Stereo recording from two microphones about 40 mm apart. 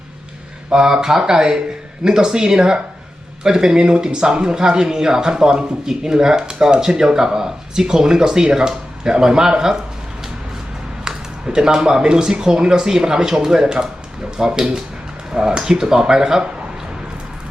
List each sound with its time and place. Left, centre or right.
0.7 s speech: centre
11.0 s speech: centre